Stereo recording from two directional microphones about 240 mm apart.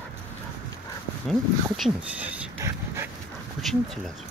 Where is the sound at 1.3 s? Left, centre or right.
Centre.